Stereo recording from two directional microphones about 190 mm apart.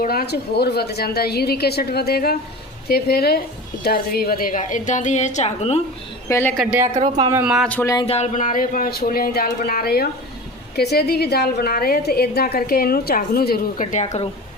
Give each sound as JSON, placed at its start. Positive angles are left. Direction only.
{"t": 0.0, "sound": "a woman's voice", "side_deg": 55}
{"t": 6.2, "sound": "a woman's voice", "side_deg": 15}
{"t": 6.6, "sound": "speech", "side_deg": -5}
{"t": 6.9, "sound": "speech", "side_deg": -25}
{"t": 7.4, "sound": "speech", "side_deg": 0}
{"t": 7.9, "sound": "a woman's voice", "side_deg": 30}